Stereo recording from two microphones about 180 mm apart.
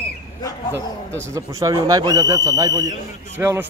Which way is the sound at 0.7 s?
15° right (ahead or behind).